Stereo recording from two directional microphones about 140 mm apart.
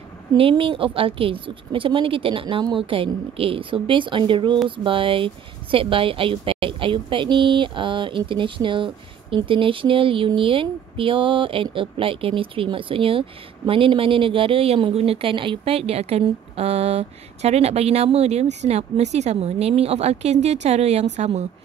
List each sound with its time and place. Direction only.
0.4 s speech: 40° right (ahead or behind)